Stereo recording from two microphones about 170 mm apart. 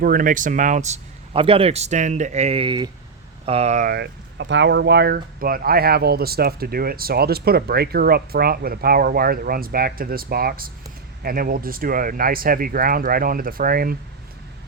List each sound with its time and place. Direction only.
0.0 s speech: 55° right (ahead or behind)
3.9 s speech: 90° right; by 13.9 s 60° right (ahead or behind)